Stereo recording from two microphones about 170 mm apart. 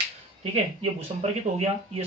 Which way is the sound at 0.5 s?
35° right (ahead or behind).